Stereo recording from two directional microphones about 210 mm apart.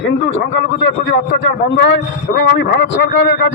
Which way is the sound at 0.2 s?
65° left (ahead or behind).